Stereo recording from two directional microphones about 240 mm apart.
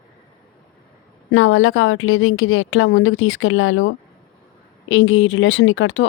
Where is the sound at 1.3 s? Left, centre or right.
Left.